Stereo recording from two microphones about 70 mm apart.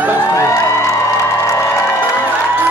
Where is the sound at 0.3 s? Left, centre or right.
Left.